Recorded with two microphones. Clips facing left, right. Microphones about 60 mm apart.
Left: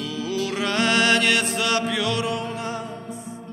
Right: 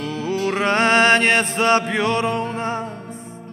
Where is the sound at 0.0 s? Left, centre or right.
Right.